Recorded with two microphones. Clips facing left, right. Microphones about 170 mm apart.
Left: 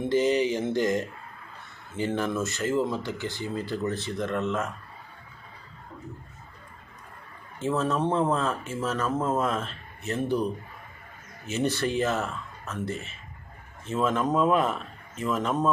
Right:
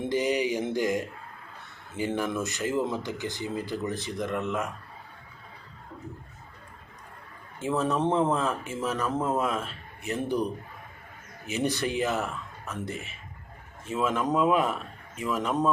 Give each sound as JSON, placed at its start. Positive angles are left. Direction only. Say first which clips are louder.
{"t": 0.0, "sound": "speech", "louder": "left 3 dB", "side_deg": -15}
{"t": 7.6, "sound": "speech", "louder": "even", "side_deg": -15}